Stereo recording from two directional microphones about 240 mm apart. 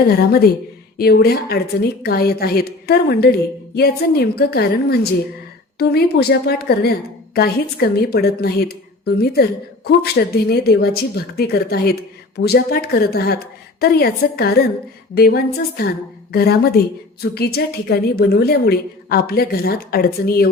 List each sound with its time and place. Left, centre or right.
0.9 s a woman's voice: left